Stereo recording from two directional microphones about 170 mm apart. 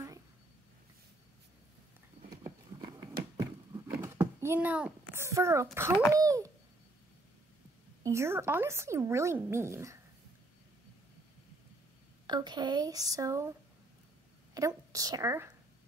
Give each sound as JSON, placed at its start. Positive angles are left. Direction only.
{"t": 2.4, "sound": "a sound", "side_deg": -25}
{"t": 6.1, "sound": "speech", "side_deg": -20}
{"t": 8.0, "sound": "speech", "side_deg": -15}
{"t": 12.3, "sound": "speech", "side_deg": -25}
{"t": 14.5, "sound": "a woman's voice", "side_deg": -20}